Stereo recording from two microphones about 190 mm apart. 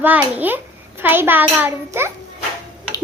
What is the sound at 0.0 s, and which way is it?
A child's voice, 10° right (ahead or behind).